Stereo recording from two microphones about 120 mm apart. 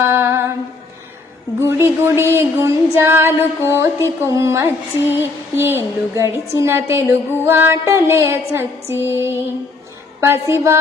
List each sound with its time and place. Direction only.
0.0 s humming: 20° right (ahead or behind)
1.5 s a woman's voice: 20° right (ahead or behind)